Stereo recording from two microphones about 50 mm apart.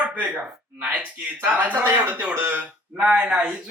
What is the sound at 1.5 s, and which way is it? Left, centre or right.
Speech, right.